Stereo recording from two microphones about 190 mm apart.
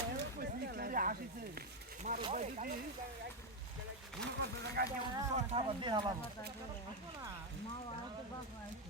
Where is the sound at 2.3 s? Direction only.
40° right (ahead or behind).